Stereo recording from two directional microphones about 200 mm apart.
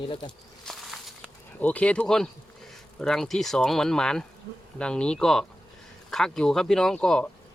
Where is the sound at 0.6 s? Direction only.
Centre (ahead or behind).